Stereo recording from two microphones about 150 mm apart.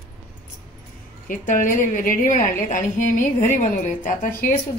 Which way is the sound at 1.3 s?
65° left (ahead or behind).